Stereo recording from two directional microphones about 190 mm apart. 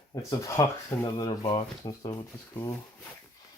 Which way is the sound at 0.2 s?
15° left (ahead or behind).